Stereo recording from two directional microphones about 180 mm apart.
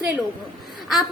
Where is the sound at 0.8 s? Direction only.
Centre (ahead or behind).